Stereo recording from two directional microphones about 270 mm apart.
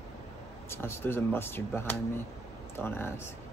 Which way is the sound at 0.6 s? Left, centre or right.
Centre.